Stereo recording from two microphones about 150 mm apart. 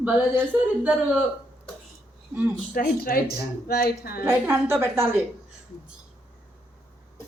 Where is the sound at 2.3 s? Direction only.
15° right (ahead or behind).